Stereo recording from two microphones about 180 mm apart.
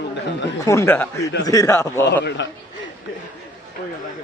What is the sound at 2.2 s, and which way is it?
Speech, 75° left (ahead or behind).